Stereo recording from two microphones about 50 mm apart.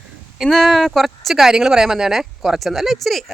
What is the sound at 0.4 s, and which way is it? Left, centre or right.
Speech, centre.